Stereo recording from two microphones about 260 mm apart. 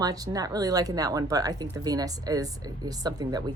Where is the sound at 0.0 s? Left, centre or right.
Centre.